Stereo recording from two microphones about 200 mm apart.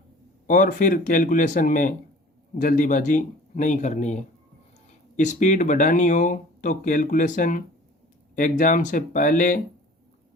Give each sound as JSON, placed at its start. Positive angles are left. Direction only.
{"t": 0.4, "sound": "speech", "side_deg": 40}